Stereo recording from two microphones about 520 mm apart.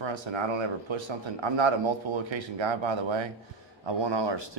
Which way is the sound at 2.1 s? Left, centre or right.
Right.